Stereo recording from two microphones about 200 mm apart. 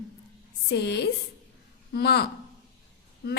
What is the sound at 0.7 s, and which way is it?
A woman's voice, 55° left (ahead or behind).